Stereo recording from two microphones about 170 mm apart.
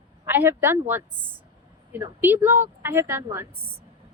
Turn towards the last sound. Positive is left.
turn(degrees=-15)  # may be behind; listen again after turning